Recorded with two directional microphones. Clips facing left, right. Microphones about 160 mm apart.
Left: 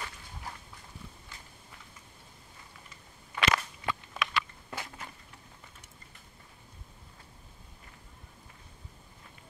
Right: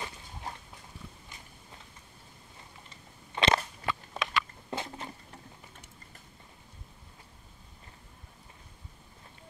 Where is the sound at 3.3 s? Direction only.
30° right (ahead or behind).